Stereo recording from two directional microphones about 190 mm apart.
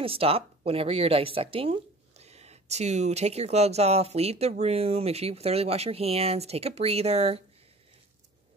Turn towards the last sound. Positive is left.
turn(degrees=-35)  # may be behind; listen again after turning